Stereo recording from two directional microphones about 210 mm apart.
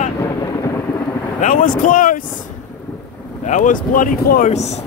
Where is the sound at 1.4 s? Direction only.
40° left (ahead or behind).